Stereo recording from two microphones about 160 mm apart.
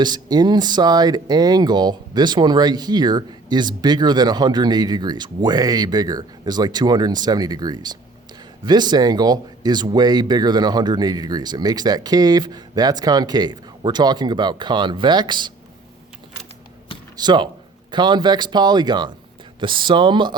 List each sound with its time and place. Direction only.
0.0 s speech: 25° right (ahead or behind)
17.2 s speech: 25° right (ahead or behind)